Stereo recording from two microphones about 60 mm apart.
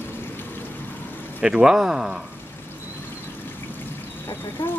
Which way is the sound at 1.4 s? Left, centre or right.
Centre.